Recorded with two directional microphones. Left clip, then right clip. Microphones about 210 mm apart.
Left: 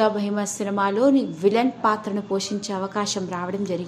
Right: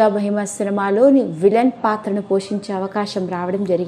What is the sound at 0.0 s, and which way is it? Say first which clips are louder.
A woman's voice: right 5 dB; 20° right (ahead or behind).